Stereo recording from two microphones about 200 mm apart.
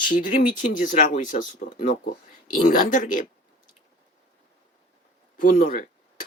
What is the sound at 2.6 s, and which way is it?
Speech, 40° left (ahead or behind).